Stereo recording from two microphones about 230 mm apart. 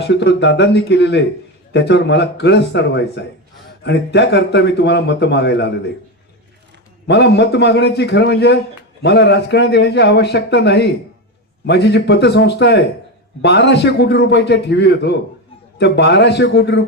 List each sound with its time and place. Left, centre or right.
0.0 s a man's voice: left
7.1 s a man's voice: left